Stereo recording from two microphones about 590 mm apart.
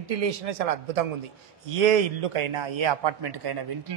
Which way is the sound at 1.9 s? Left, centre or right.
Right.